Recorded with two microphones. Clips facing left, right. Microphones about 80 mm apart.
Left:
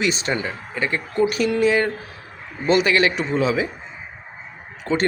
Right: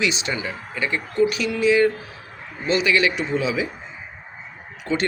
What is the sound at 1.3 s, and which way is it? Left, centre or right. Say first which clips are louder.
A man's voice: left 1 dB; left.